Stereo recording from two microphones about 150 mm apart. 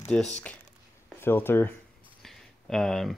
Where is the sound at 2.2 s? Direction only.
Centre (ahead or behind).